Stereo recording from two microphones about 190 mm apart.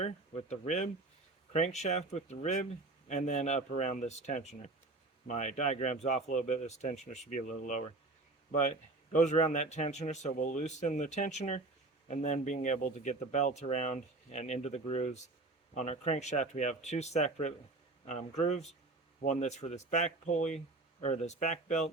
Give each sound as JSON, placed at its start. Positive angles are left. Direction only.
{"t": 0.0, "sound": "speech", "side_deg": 35}
{"t": 9.1, "sound": "speech", "side_deg": 35}